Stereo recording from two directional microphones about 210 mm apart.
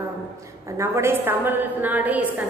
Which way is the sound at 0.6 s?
15° right (ahead or behind).